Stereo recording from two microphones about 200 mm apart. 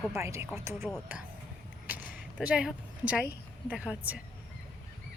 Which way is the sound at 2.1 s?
5° right (ahead or behind).